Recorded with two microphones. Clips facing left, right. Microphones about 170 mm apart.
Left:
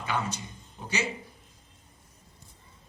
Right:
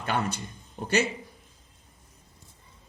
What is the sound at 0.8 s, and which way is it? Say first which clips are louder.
Speech: right 7 dB; 65° right (ahead or behind).